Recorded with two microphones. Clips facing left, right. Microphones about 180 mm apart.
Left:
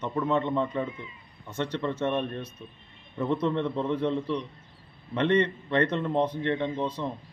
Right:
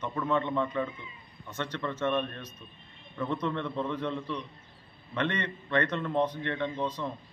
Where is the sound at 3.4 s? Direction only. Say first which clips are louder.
Left 4 dB; 20° left (ahead or behind).